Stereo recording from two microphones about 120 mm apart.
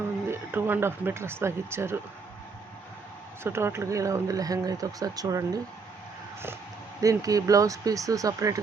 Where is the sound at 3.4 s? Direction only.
20° right (ahead or behind).